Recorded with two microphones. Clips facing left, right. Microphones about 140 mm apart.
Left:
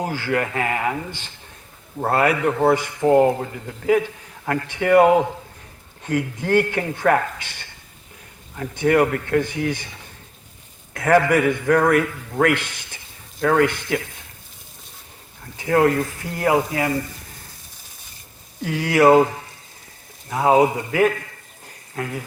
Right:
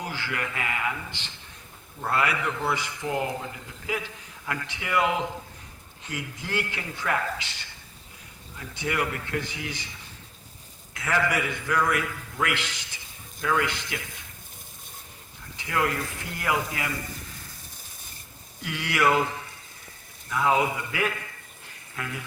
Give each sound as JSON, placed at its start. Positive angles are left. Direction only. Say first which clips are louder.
{"t": 0.0, "sound": "speech", "louder": "left 10 dB", "side_deg": 45}
{"t": 10.9, "sound": "speech", "louder": "left 10 dB", "side_deg": 50}
{"t": 15.5, "sound": "speech", "louder": "left 10 dB", "side_deg": 45}
{"t": 18.6, "sound": "speech", "louder": "left 9 dB", "side_deg": 40}